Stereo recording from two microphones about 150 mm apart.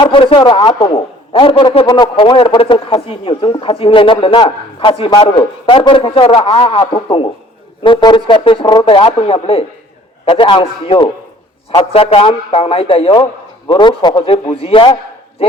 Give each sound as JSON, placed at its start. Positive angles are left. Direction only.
{"t": 0.0, "sound": "a man's voice", "side_deg": 35}